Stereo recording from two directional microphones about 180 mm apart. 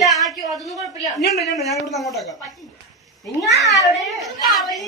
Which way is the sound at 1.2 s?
60° left (ahead or behind).